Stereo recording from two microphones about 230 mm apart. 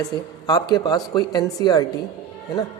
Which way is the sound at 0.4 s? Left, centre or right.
Centre.